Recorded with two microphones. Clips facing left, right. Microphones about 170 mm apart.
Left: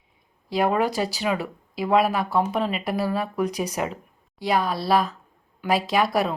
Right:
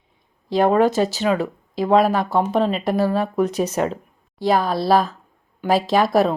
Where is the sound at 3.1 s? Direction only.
25° right (ahead or behind).